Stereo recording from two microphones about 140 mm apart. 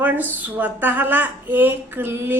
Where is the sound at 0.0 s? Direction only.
15° right (ahead or behind).